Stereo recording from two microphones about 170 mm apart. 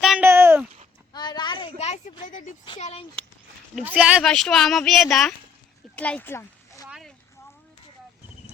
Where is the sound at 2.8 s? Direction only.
35° left (ahead or behind).